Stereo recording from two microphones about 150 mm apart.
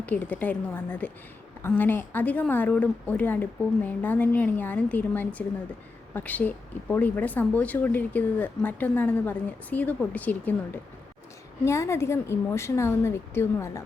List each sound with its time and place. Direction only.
0.0 s speech: 10° left (ahead or behind)